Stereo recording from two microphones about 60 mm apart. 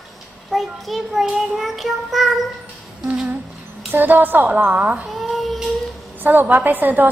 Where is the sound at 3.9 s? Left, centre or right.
Right.